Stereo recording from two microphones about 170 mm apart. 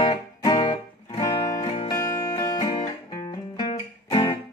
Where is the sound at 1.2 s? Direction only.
20° left (ahead or behind).